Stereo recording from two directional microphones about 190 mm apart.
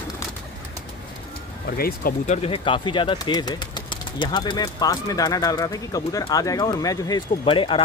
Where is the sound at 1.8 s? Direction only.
50° left (ahead or behind).